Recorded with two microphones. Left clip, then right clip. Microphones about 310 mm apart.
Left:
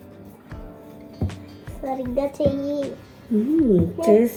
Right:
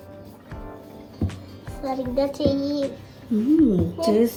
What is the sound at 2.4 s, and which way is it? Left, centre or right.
Speech, centre.